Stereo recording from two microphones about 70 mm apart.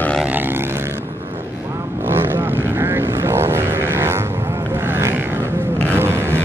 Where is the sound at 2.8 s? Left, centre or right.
Right.